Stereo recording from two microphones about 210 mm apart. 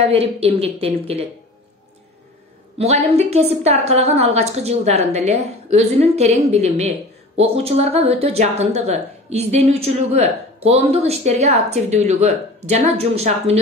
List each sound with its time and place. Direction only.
0.1 s a woman's voice: 30° right (ahead or behind)
2.8 s a woman's voice: 30° right (ahead or behind)